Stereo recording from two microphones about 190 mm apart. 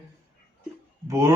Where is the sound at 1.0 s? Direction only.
15° right (ahead or behind).